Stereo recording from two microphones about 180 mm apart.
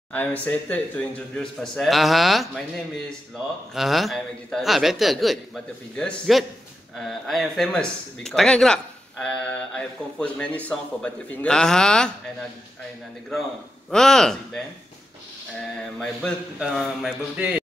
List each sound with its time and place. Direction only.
0.1 s speech: 10° left (ahead or behind)
3.7 s speech: centre (ahead or behind)
16.5 s speech: centre (ahead or behind)